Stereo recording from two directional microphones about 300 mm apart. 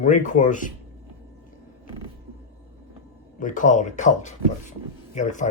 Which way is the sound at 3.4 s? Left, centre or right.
Left.